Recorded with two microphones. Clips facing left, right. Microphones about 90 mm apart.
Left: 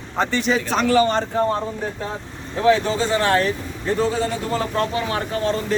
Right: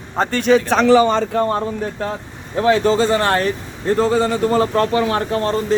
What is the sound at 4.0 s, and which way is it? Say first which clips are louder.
Speech: right 5 dB; 75° right (ahead or behind).